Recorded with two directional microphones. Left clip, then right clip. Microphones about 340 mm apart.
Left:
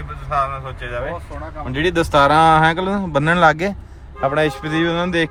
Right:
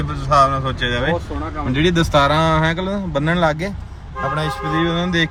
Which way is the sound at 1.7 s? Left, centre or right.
Left.